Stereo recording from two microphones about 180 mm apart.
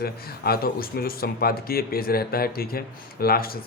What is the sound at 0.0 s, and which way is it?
Speech, 60° left (ahead or behind).